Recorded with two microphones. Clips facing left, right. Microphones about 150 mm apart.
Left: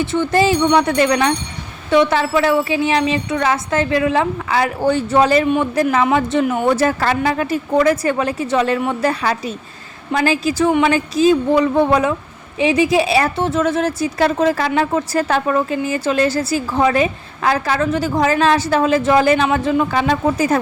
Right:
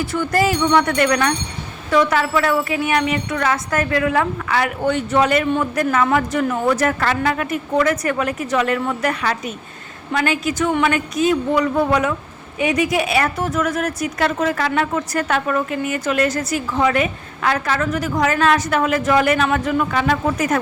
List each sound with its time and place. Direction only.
0.0 s a woman's voice: 25° left (ahead or behind)